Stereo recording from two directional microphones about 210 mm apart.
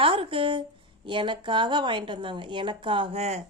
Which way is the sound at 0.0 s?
25° right (ahead or behind).